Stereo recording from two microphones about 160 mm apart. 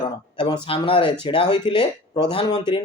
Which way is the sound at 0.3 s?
30° left (ahead or behind).